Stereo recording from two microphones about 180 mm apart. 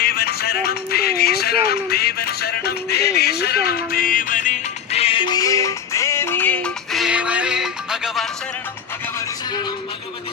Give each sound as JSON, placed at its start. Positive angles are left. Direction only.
{"t": 0.0, "sound": "music", "side_deg": 60}